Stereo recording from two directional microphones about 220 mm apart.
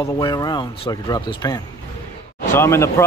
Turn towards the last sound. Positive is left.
turn(degrees=10)  # may be behind; listen again after turning